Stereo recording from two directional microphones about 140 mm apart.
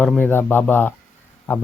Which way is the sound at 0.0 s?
10° left (ahead or behind).